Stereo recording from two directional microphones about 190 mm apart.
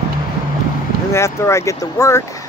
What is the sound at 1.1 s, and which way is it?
Speech, 15° left (ahead or behind).